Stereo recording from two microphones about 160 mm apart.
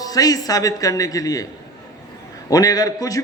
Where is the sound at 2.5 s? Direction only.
20° left (ahead or behind).